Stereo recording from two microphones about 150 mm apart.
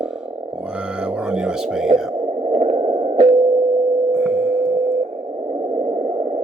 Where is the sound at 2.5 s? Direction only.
35° right (ahead or behind).